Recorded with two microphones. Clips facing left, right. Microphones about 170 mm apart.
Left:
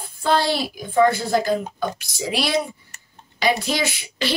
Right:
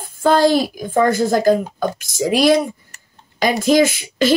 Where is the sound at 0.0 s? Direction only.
45° right (ahead or behind).